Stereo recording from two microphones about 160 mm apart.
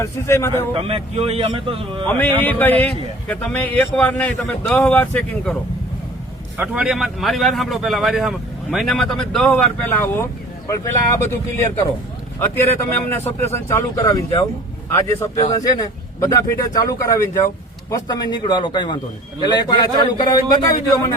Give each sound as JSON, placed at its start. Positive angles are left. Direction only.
{"t": 0.0, "sound": "a man's voice", "side_deg": 15}
{"t": 0.7, "sound": "a man's voice", "side_deg": -35}
{"t": 2.0, "sound": "a man's voice", "side_deg": 10}
{"t": 6.6, "sound": "a man's voice", "side_deg": -5}
{"t": 13.4, "sound": "speech", "side_deg": 15}